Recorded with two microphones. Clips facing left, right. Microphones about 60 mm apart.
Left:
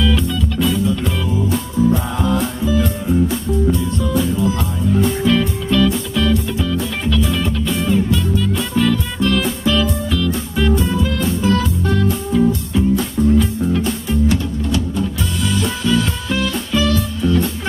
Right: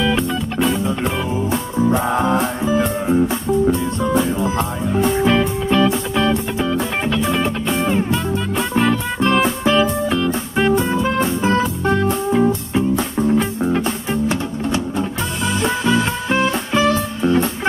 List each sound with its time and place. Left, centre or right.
0.0 s music: right